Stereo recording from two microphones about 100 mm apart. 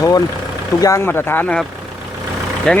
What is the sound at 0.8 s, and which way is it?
Speech, 30° left (ahead or behind).